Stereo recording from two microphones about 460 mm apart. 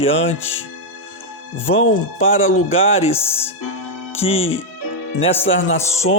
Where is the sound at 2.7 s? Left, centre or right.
Centre.